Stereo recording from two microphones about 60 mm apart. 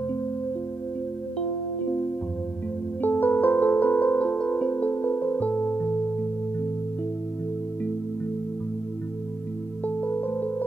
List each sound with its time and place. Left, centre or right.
3.0 s music: left
9.8 s music: left